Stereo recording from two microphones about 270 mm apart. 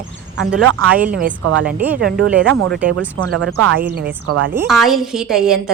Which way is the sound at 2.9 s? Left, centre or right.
Right.